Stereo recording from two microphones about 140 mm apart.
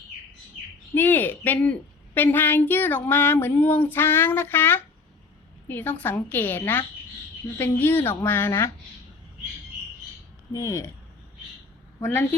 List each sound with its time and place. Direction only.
0.9 s speech: 15° left (ahead or behind)
10.5 s speech: 25° left (ahead or behind)
11.9 s speech: 20° left (ahead or behind)